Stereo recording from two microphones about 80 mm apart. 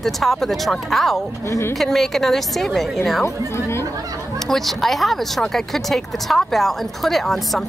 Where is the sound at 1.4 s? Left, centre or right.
Left.